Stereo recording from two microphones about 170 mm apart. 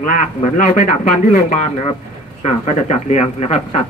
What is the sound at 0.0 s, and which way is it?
A man's voice, 50° left (ahead or behind).